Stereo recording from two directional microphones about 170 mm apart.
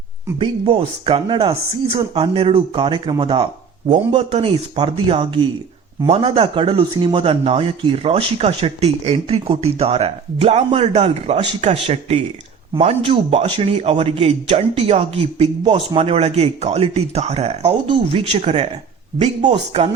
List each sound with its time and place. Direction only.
0.3 s speech: 30° right (ahead or behind)